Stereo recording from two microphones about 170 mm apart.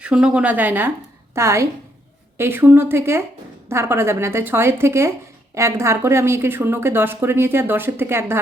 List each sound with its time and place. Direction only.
0.0 s speech: 5° right (ahead or behind)